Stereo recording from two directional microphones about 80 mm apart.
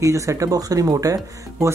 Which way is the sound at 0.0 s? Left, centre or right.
Right.